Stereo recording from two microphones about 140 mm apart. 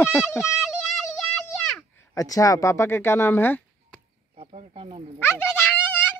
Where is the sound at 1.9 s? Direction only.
25° left (ahead or behind).